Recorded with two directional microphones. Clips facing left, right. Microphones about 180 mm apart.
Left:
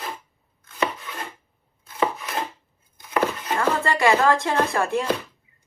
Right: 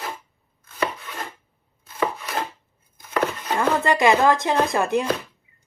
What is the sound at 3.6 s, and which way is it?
Speech, 20° right (ahead or behind).